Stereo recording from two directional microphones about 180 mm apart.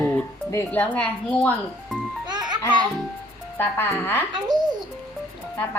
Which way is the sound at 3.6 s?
10° left (ahead or behind).